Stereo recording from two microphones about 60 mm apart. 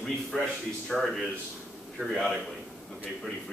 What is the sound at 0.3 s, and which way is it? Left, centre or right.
A man's voice, centre.